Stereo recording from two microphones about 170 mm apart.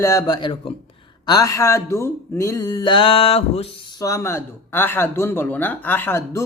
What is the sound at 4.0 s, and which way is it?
Speech, 20° left (ahead or behind).